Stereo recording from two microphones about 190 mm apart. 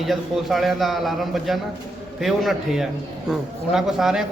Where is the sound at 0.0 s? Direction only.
Centre (ahead or behind).